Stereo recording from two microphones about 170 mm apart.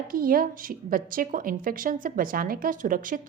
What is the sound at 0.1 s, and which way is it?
A woman's voice, 60° right (ahead or behind).